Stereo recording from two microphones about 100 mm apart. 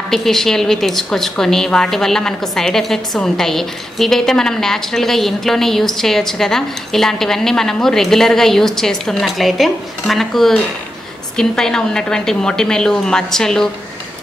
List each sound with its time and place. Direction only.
0.1 s a woman's voice: 5° left (ahead or behind)